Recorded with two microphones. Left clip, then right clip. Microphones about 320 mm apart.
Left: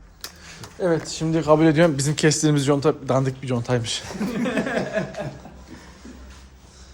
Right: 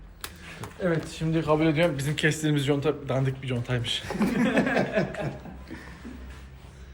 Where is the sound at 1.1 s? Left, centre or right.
Left.